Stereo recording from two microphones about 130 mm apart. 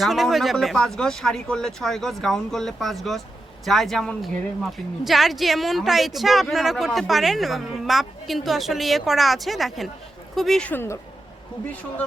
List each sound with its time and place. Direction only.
0.0 s a woman's voice: centre (ahead or behind)
10.7 s speech: 15° left (ahead or behind)